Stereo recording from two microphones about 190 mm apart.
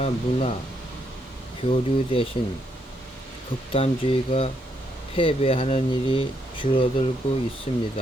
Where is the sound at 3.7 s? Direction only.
30° left (ahead or behind).